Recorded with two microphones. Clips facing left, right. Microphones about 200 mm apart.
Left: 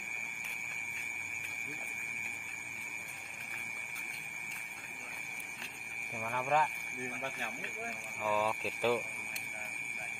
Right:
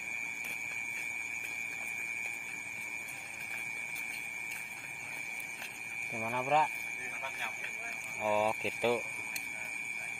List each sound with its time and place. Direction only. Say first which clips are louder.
6.2 s speech: right 2 dB; 15° right (ahead or behind)
8.2 s speech: right 2 dB; 20° right (ahead or behind)